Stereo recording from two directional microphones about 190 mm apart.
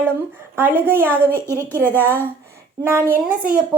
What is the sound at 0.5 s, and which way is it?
Speech, 10° right (ahead or behind).